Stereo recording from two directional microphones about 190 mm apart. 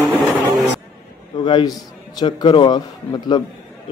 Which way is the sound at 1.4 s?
25° left (ahead or behind).